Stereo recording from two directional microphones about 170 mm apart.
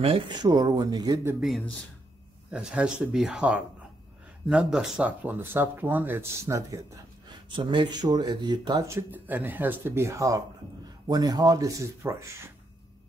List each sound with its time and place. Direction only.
0.0 s speech: 30° right (ahead or behind)
1.4 s speech: centre (ahead or behind); by 12.3 s 15° right (ahead or behind)